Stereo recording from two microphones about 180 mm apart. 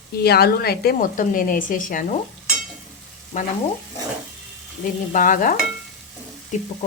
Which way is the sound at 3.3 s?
45° left (ahead or behind).